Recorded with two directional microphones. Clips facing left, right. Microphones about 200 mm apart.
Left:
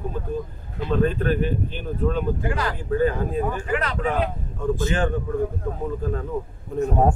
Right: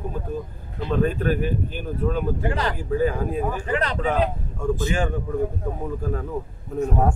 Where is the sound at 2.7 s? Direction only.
10° right (ahead or behind).